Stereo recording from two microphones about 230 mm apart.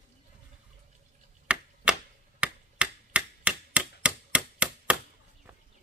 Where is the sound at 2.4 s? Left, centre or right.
Centre.